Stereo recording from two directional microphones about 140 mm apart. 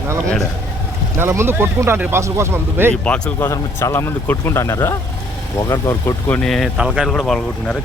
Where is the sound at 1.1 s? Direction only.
20° right (ahead or behind).